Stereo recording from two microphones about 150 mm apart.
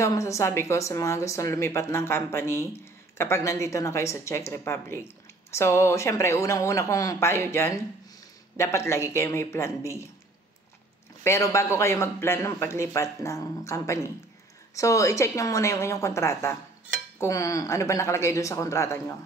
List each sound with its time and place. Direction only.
0.0 s a woman's voice: 20° left (ahead or behind)
11.2 s a woman's voice: 20° left (ahead or behind)